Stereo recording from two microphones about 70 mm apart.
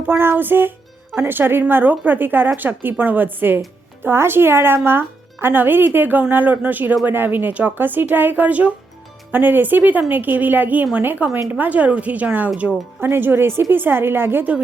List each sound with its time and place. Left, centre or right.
0.2 s a woman's voice: right